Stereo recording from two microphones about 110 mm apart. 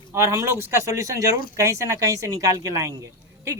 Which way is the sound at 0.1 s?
25° right (ahead or behind).